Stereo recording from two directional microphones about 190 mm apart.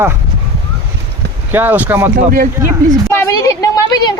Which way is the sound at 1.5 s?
10° right (ahead or behind).